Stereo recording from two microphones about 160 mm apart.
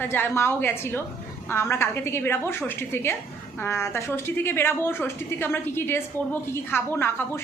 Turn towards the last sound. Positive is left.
turn(degrees=15)  # may be behind; listen again after turning